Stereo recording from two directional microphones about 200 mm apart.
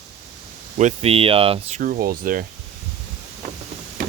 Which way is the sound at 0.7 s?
35° right (ahead or behind).